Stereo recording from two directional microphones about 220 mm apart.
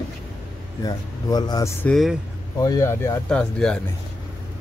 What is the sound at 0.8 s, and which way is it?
Speech, 20° left (ahead or behind).